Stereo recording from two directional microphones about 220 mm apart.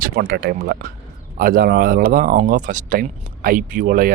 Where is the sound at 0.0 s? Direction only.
40° right (ahead or behind).